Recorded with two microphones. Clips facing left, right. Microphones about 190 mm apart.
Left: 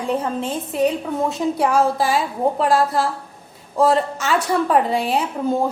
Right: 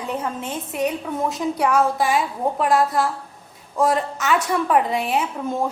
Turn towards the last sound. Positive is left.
turn(degrees=30)  # may be behind; listen again after turning